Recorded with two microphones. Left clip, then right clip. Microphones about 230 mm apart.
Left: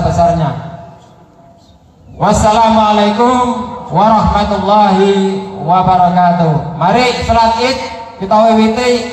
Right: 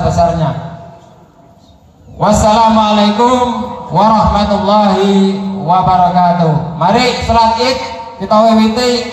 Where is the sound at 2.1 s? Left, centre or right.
Right.